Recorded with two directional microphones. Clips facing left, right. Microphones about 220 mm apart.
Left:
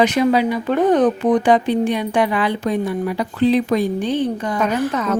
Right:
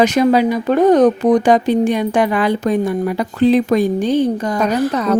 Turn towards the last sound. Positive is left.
turn(degrees=-35)  # may be behind; listen again after turning